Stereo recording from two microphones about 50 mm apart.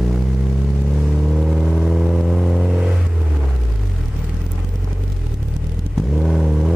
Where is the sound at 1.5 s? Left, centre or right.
Centre.